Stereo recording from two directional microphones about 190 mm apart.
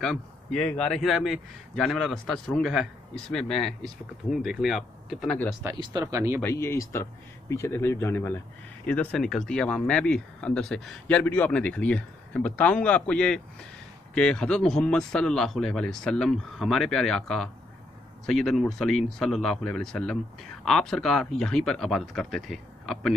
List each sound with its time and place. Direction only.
0.0 s speech: 5° left (ahead or behind)
5.6 s speech: 15° right (ahead or behind)
6.4 s speech: 15° left (ahead or behind)